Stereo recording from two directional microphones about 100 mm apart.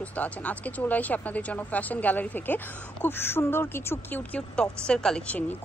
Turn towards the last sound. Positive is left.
turn(degrees=10)  # may be behind; listen again after turning